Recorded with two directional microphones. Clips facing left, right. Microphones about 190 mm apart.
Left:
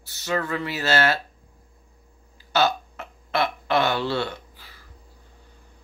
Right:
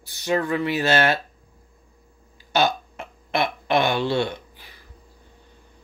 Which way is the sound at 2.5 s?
15° right (ahead or behind).